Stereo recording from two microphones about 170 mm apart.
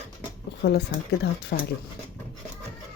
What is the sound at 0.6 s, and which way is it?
Speech, 75° left (ahead or behind).